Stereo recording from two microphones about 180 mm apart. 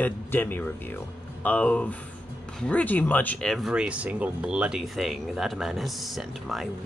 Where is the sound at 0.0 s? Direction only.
10° left (ahead or behind).